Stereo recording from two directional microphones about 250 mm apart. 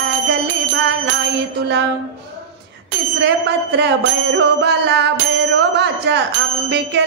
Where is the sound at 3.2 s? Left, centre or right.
Right.